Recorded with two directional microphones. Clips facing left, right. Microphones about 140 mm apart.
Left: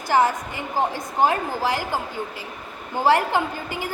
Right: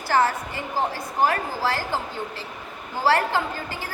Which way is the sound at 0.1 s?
15° left (ahead or behind).